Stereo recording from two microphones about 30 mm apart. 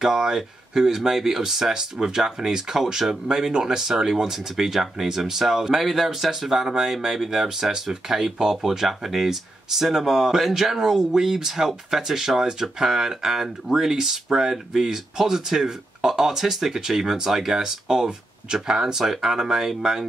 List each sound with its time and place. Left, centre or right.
0.0 s speech: centre